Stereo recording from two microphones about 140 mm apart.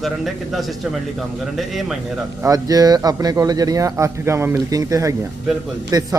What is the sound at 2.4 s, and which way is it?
Speech, 25° right (ahead or behind).